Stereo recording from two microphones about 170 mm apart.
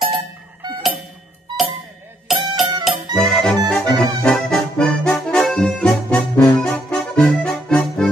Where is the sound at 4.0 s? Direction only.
5° left (ahead or behind).